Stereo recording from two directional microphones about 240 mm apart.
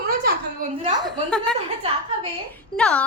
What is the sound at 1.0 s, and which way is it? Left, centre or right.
A woman's voice, centre.